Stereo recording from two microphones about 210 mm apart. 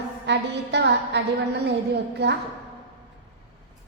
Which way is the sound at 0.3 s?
55° right (ahead or behind).